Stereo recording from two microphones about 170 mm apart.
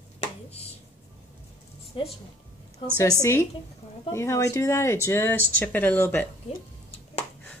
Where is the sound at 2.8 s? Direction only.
30° left (ahead or behind).